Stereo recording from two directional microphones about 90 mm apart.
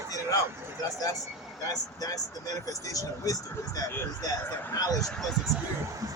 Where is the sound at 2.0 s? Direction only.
45° left (ahead or behind).